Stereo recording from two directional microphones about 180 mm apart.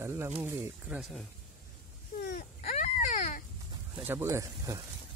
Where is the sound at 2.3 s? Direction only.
40° left (ahead or behind).